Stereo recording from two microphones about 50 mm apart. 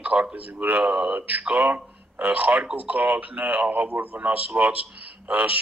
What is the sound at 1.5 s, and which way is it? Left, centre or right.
Speech, right.